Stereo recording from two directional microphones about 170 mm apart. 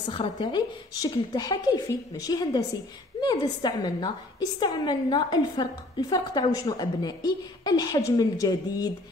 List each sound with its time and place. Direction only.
0.0 s a woman's voice: 25° left (ahead or behind)